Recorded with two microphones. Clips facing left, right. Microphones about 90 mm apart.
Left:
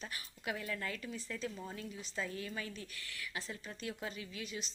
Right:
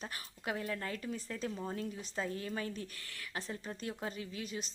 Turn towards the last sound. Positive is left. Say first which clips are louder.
# right 3 dB
turn(degrees=-40)  # may be behind; listen again after turning